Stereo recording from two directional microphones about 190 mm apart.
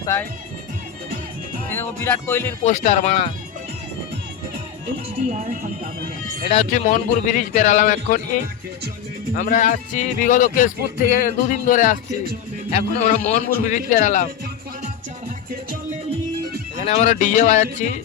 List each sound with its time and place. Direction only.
0.0 s speech: 15° left (ahead or behind)
1.6 s speech: 10° left (ahead or behind)
2.6 s a man's voice: 35° left (ahead or behind)
5.1 s speech: 40° right (ahead or behind)
6.5 s a man's voice: 40° left (ahead or behind)
9.3 s a man's voice: 45° left (ahead or behind)
16.8 s a man's voice: 35° left (ahead or behind)